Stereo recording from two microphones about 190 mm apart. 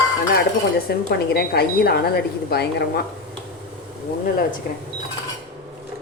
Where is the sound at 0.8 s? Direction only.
55° left (ahead or behind).